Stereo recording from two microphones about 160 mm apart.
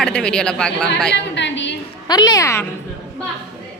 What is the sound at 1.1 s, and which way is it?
Speech, 90° left.